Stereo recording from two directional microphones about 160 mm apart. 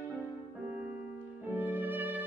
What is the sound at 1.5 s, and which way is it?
Music, 10° right (ahead or behind).